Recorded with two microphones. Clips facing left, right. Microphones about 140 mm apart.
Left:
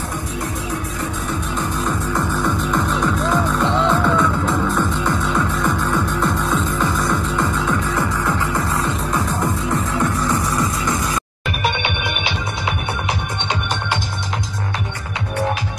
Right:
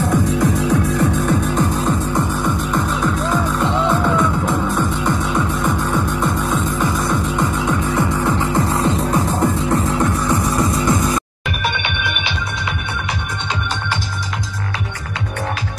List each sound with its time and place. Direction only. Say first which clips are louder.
2.1 s music: right 1 dB; 15° right (ahead or behind)
2.7 s music: even; centre (ahead or behind); by 9.8 s 30° right (ahead or behind)